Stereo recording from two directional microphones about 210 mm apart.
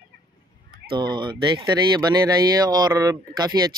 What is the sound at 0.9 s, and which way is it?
Speech, 20° right (ahead or behind).